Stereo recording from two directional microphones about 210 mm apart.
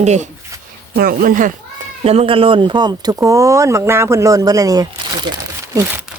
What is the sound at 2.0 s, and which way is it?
Speech, 30° right (ahead or behind).